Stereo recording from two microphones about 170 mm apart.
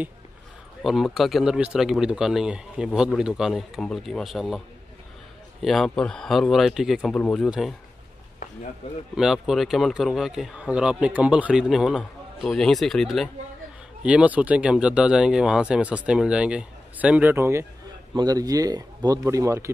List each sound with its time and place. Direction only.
0.8 s speech: centre (ahead or behind)
5.6 s speech: centre (ahead or behind)
9.1 s speech: 5° right (ahead or behind); by 19.7 s 20° right (ahead or behind)